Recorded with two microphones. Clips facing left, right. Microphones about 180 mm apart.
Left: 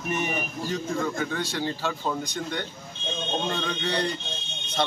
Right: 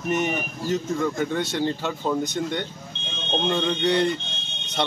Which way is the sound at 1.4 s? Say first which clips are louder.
Right 4 dB; 20° right (ahead or behind).